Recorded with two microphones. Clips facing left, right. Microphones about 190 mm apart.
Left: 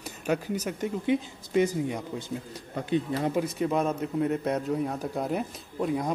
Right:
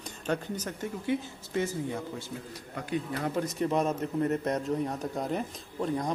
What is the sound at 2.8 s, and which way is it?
Speech, 25° left (ahead or behind).